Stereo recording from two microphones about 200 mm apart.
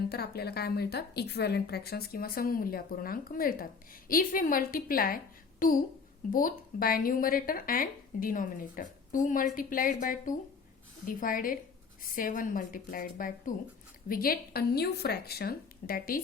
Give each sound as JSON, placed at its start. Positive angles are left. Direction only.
{"t": 0.1, "sound": "a woman's voice", "side_deg": 50}